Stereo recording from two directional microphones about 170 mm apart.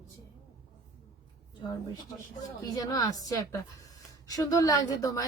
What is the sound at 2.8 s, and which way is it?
A woman's voice, 20° left (ahead or behind).